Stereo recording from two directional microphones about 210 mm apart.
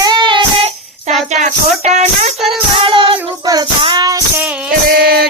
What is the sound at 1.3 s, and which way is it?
Music, 35° right (ahead or behind).